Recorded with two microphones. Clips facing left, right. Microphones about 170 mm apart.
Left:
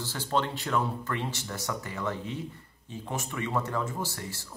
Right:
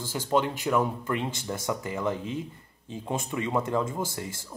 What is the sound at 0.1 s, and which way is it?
Speech, 10° right (ahead or behind).